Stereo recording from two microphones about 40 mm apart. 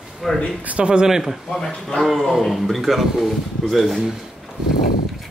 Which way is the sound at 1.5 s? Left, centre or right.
Centre.